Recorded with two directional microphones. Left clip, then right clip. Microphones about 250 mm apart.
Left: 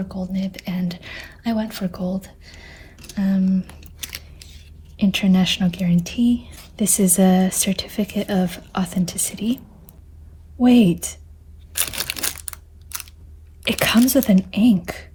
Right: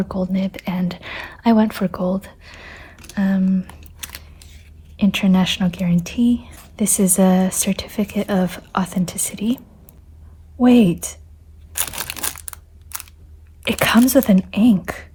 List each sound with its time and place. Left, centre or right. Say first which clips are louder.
0.3 s speech: right 4 dB; centre
2.2 s a sound: right 4 dB; centre
3.2 s speech: right 2 dB; centre
10.6 s speech: right 2 dB; centre
11.8 s a sound: left 1 dB; centre
13.7 s speech: right 2 dB; centre